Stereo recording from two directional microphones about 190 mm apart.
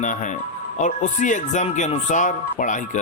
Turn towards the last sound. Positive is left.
turn(degrees=40)  # may be behind; listen again after turning